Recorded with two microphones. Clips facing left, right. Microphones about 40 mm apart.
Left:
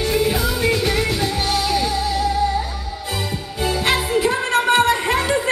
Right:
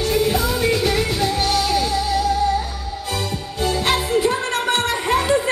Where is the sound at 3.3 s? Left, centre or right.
Centre.